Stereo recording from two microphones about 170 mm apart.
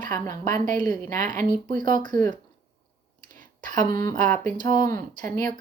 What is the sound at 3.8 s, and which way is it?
A woman's voice, 50° right (ahead or behind).